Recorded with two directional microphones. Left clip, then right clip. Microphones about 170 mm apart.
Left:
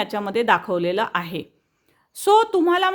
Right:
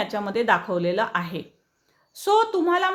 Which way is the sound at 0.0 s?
45° left (ahead or behind).